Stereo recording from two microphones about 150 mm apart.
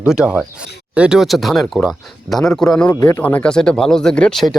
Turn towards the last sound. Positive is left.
turn(degrees=5)  # may be behind; listen again after turning